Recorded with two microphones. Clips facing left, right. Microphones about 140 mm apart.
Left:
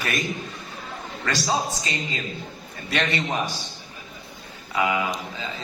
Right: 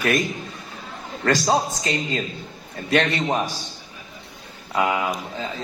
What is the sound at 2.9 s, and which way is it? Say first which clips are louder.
Speech: right 5 dB; 40° right (ahead or behind).